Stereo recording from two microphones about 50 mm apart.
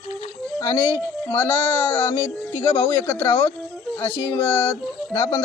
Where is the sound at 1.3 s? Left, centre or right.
Left.